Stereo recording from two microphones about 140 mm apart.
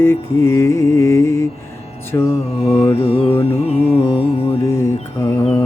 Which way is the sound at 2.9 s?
45° left (ahead or behind).